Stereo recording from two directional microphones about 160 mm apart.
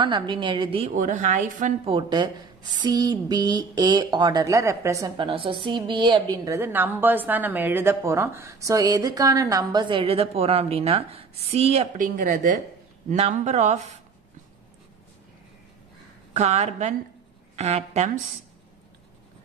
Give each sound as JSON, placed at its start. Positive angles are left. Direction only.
{"t": 0.0, "sound": "a woman's voice", "side_deg": -30}
{"t": 0.9, "sound": "speech", "side_deg": -50}
{"t": 1.9, "sound": "a woman's voice", "side_deg": -30}
{"t": 5.1, "sound": "a woman's voice", "side_deg": -30}
{"t": 16.3, "sound": "speech", "side_deg": -45}